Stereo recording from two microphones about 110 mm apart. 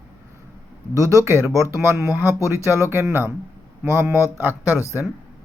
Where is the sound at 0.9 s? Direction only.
30° right (ahead or behind).